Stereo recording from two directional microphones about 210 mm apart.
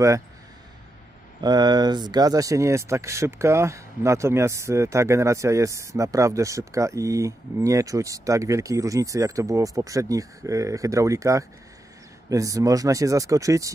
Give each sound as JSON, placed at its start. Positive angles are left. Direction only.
{"t": 1.4, "sound": "speech", "side_deg": -20}